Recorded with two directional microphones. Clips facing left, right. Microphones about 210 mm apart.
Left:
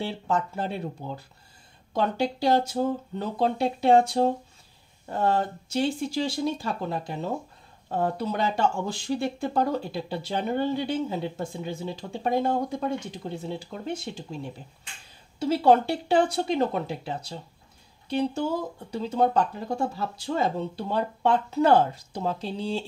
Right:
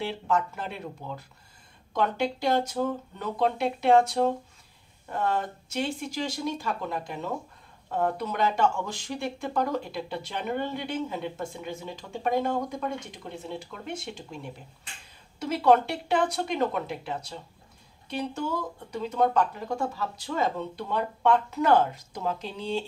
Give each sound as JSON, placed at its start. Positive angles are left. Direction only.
{"t": 0.0, "sound": "speech", "side_deg": 30}